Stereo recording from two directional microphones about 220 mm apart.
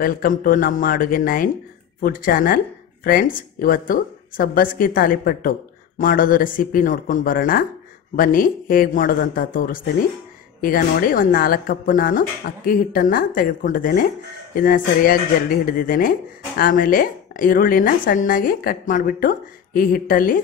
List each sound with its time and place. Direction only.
0.0 s speech: 40° left (ahead or behind)